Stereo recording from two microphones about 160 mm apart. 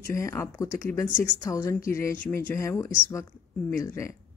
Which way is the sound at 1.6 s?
20° left (ahead or behind).